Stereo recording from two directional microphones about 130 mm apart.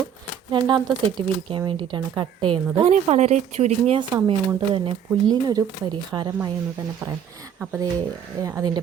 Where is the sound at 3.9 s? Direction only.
35° right (ahead or behind).